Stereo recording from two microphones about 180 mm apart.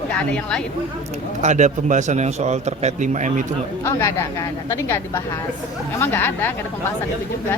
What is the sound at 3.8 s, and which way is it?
Speech, 15° left (ahead or behind).